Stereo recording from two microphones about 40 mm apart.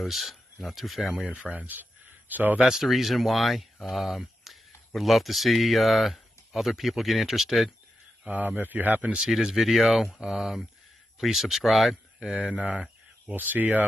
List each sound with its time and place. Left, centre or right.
0.0 s speech: centre
1.2 s speech: right
1.7 s a sound: right
2.6 s speech: centre
8.3 s speech: right
9.3 s speech: centre
12.4 s speech: right
13.3 s speech: right